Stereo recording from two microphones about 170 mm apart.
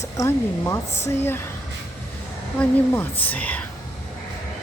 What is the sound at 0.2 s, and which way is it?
Speech, 15° left (ahead or behind).